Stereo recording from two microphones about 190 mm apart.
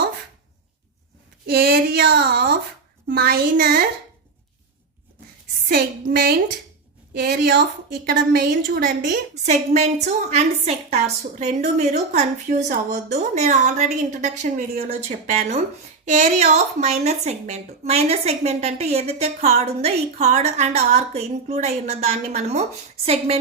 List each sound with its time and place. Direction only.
1.5 s a woman's voice: 55° right (ahead or behind)
5.6 s a woman's voice: 50° right (ahead or behind)
9.3 s speech: 35° right (ahead or behind)